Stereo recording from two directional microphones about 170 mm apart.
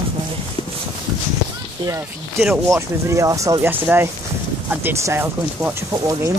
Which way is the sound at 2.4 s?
15° right (ahead or behind).